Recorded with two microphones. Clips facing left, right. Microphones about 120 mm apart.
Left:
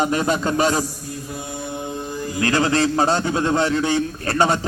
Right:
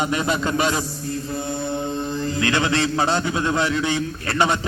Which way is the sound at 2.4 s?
35° left (ahead or behind).